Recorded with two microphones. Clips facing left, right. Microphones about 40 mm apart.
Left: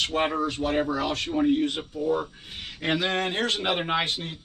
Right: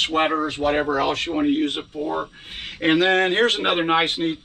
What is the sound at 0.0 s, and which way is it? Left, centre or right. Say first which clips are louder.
A man's voice: right 5 dB; right.